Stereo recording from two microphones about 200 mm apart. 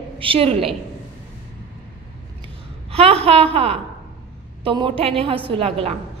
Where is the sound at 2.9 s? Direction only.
30° right (ahead or behind).